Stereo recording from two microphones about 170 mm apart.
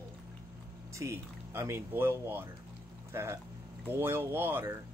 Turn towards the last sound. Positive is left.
turn(degrees=-10)  # may be behind; listen again after turning